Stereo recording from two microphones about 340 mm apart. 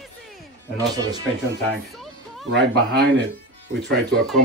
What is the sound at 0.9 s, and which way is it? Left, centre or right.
Speech, centre.